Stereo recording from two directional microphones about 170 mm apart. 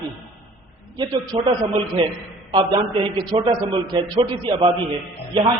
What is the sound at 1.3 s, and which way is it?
A man's voice, 30° right (ahead or behind).